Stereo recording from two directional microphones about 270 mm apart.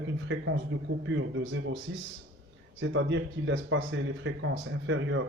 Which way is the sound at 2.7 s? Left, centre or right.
Right.